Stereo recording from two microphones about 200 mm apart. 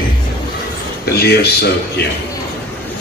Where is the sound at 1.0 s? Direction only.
55° left (ahead or behind).